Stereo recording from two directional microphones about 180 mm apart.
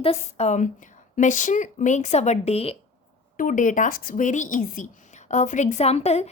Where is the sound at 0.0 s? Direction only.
35° left (ahead or behind).